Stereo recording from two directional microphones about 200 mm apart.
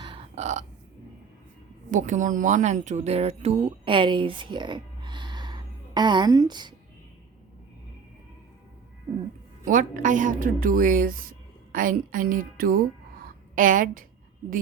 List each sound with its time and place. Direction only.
0.0 s a sound: 30° right (ahead or behind)
1.9 s speech: 40° right (ahead or behind); by 6.7 s 20° right (ahead or behind)
9.6 s a woman's voice: 40° right (ahead or behind)